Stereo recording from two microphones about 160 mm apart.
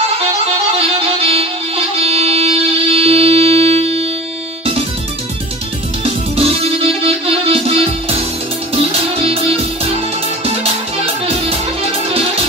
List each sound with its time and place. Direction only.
0.7 s music: 40° right (ahead or behind)
6.3 s music: 35° right (ahead or behind)
9.2 s music: 35° right (ahead or behind)